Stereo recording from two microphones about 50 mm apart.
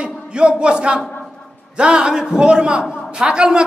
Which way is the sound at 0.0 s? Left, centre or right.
Centre.